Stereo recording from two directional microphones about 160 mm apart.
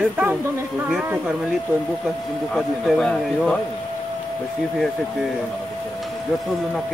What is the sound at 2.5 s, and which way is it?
Speech, 5° left (ahead or behind).